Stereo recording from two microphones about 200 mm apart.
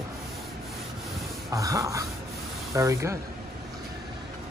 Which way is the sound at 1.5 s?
15° right (ahead or behind).